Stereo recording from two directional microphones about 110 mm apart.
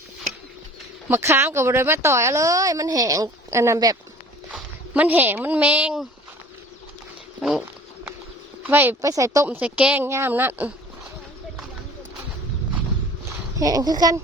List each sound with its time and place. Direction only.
1.0 s a woman's voice: 20° right (ahead or behind)
4.9 s a woman's voice: 15° right (ahead or behind)
8.6 s a woman's voice: 20° right (ahead or behind)
9.0 s a woman's voice: 30° right (ahead or behind)
9.6 s a woman's voice: 10° right (ahead or behind)
13.6 s speech: 35° right (ahead or behind)